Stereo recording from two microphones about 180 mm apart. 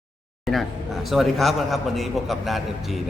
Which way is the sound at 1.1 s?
Centre (ahead or behind).